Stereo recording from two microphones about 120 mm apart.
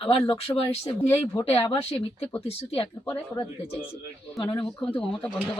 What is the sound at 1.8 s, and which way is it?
Speech, 60° left (ahead or behind).